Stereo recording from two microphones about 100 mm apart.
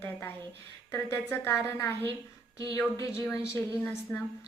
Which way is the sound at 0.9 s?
20° left (ahead or behind).